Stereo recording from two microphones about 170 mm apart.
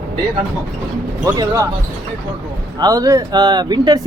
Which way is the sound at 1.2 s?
20° right (ahead or behind).